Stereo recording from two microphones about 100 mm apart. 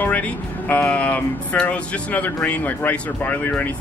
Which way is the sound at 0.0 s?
15° left (ahead or behind).